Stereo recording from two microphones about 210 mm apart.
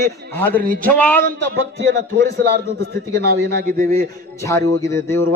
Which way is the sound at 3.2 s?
40° right (ahead or behind).